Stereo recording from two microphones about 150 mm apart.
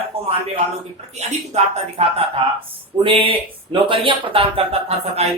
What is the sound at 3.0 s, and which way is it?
Speech, 35° right (ahead or behind).